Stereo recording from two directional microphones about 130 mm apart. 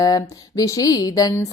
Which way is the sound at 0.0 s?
25° left (ahead or behind).